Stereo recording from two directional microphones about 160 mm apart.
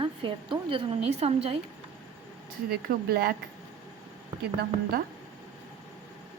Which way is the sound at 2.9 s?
65° right (ahead or behind).